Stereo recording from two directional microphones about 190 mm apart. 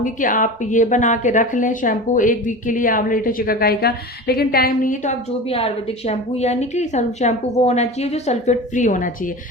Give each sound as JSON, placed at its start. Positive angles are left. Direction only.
{"t": 0.0, "sound": "a woman's voice", "side_deg": 45}
{"t": 5.5, "sound": "a woman's voice", "side_deg": 30}